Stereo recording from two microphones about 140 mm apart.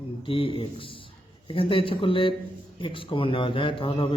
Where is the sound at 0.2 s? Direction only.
40° left (ahead or behind).